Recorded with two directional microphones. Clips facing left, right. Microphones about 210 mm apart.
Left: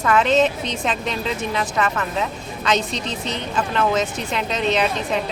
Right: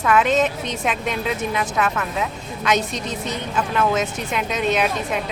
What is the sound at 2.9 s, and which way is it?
Speech, 45° right (ahead or behind).